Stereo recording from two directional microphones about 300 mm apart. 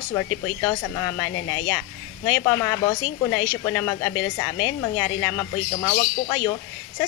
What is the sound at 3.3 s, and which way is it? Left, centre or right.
Speech, left.